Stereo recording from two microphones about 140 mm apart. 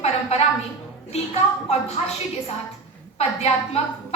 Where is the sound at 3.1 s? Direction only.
50° left (ahead or behind).